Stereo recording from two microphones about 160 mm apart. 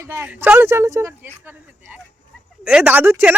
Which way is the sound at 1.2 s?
10° right (ahead or behind).